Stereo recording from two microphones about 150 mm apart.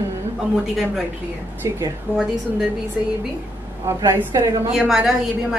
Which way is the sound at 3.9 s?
20° right (ahead or behind).